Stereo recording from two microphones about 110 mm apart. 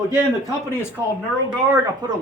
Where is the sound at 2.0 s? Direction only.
40° right (ahead or behind).